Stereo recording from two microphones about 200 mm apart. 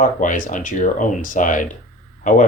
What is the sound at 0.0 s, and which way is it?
Speech, 40° left (ahead or behind).